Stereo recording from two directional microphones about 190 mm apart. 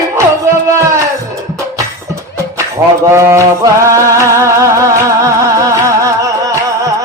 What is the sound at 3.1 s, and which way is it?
Music, 15° right (ahead or behind).